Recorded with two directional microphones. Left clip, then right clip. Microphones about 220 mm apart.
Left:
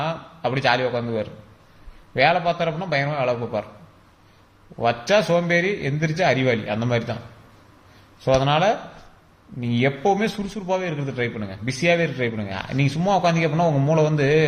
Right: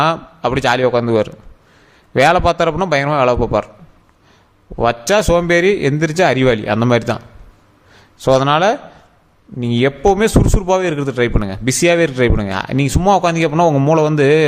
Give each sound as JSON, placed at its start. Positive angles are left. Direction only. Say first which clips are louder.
{"t": 0.0, "sound": "a man's voice", "louder": "right 10 dB", "side_deg": -50}
{"t": 4.8, "sound": "a man's voice", "louder": "right 5 dB", "side_deg": -50}
{"t": 8.2, "sound": "a man's voice", "louder": "right 7 dB", "side_deg": -50}